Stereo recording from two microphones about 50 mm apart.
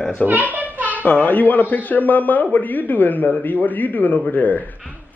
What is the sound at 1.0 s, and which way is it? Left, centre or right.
Speech, left.